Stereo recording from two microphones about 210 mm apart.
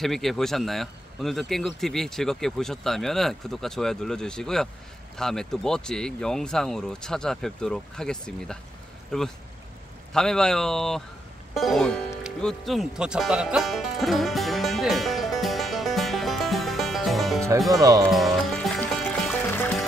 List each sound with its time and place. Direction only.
0.0 s speech: centre (ahead or behind)
12.2 s music: centre (ahead or behind)
17.6 s speech: 15° right (ahead or behind)
18.0 s music: centre (ahead or behind)